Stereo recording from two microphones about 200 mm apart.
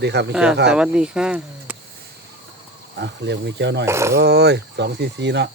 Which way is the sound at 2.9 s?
60° right (ahead or behind).